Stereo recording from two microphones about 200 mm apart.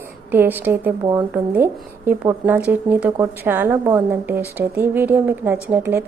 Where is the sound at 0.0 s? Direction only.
10° right (ahead or behind).